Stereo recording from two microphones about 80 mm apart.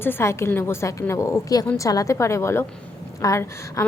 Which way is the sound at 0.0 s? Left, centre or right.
Left.